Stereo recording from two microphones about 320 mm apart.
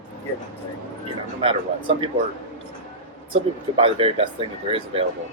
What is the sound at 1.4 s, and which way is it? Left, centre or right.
Speech, centre.